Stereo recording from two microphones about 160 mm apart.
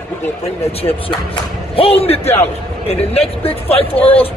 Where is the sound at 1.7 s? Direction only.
35° left (ahead or behind).